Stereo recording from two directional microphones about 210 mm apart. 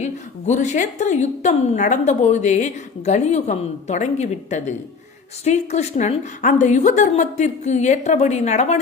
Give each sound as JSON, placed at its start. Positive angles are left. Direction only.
{"t": 0.0, "sound": "a woman's voice", "side_deg": 35}